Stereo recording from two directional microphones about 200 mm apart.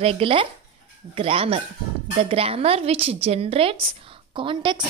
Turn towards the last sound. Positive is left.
turn(degrees=-25)  # may be behind; listen again after turning